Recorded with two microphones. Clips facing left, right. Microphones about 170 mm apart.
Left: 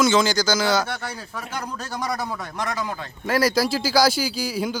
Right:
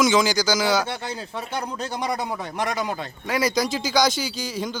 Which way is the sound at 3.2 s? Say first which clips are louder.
Left 3 dB; centre (ahead or behind).